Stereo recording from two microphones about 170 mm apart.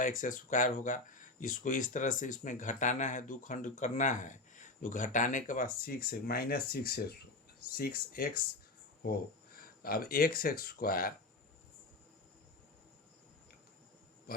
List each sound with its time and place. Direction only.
0.0 s speech: 50° left (ahead or behind)